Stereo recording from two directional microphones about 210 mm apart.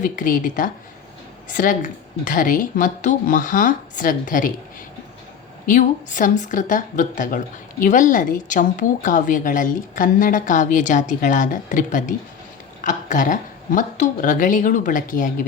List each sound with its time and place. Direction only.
0.0 s speech: 40° left (ahead or behind)
5.6 s speech: 40° left (ahead or behind)